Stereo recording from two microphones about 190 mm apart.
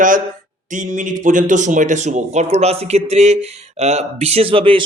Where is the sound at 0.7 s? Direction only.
40° right (ahead or behind).